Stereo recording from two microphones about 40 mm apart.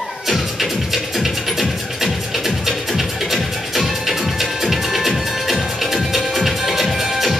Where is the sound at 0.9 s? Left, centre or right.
Centre.